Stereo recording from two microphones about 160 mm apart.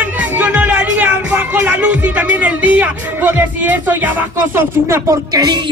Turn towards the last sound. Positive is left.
turn(degrees=-25)  # may be behind; listen again after turning